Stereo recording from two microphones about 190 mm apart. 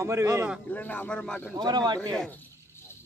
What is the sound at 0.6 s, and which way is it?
Speech, 10° left (ahead or behind).